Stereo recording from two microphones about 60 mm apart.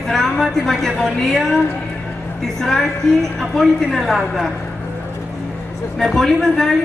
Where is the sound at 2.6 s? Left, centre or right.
Centre.